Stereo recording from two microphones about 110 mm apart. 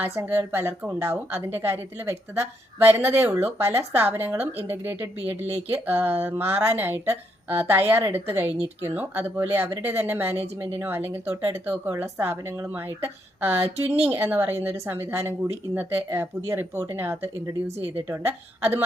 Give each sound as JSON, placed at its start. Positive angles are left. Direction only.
{"t": 0.0, "sound": "a woman's voice", "side_deg": -20}
{"t": 14.0, "sound": "a woman's voice", "side_deg": -20}